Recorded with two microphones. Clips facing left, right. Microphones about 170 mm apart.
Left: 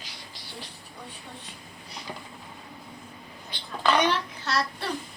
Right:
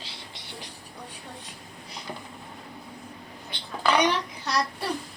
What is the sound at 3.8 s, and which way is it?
A child's voice, 15° right (ahead or behind).